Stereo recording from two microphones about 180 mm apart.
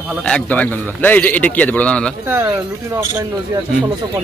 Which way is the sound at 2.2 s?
15° right (ahead or behind).